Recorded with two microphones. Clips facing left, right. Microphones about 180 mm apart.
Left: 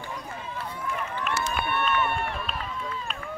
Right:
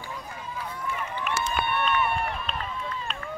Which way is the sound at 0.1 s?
Centre (ahead or behind).